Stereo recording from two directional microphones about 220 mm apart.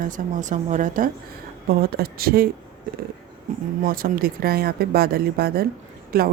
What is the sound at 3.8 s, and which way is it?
Speech, 40° right (ahead or behind).